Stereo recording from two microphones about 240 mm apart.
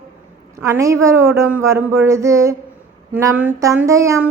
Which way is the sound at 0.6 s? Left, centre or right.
Centre.